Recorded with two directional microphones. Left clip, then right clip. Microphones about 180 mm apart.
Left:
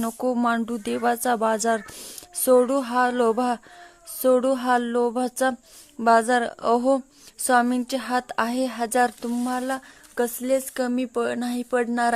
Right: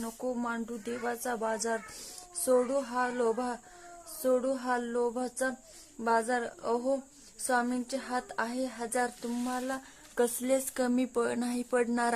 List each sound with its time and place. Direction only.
0.0 s speech: 35° left (ahead or behind)
10.2 s speech: 15° left (ahead or behind)